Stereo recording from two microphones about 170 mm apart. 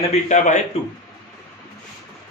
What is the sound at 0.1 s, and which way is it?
Speech, 45° left (ahead or behind).